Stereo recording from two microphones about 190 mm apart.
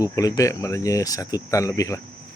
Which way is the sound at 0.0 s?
20° left (ahead or behind).